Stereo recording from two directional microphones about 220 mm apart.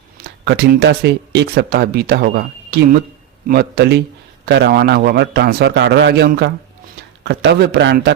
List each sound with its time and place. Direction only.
0.3 s speech: 50° right (ahead or behind)